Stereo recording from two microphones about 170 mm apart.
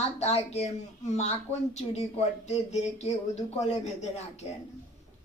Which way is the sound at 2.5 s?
40° left (ahead or behind).